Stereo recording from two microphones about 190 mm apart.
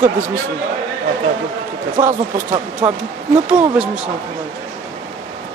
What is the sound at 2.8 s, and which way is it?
Speech, 10° right (ahead or behind).